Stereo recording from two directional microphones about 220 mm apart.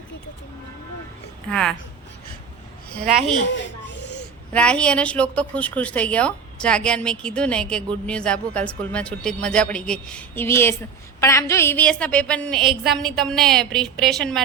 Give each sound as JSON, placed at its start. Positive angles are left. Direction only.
{"t": 1.5, "sound": "a woman's voice", "side_deg": 5}
{"t": 3.4, "sound": "a sound", "side_deg": 55}
{"t": 4.5, "sound": "a woman's voice", "side_deg": 5}